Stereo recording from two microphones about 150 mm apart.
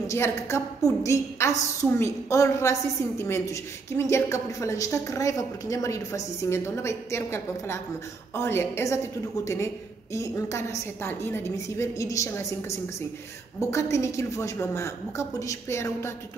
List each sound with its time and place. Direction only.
0.1 s a woman's voice: 20° left (ahead or behind)